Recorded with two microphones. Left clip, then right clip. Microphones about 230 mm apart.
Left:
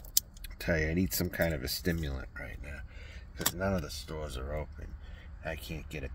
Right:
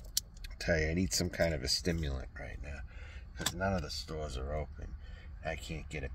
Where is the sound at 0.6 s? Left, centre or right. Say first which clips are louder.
Left 1 dB; centre.